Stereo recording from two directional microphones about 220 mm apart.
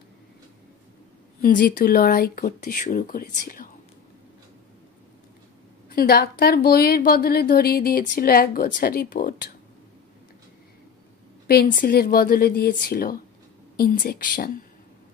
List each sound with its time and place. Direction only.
1.4 s speech: 40° left (ahead or behind)
5.9 s a woman's voice: 45° left (ahead or behind)
11.4 s a woman's voice: 40° left (ahead or behind)